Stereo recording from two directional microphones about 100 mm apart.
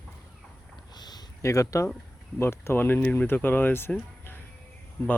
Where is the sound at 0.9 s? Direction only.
45° left (ahead or behind).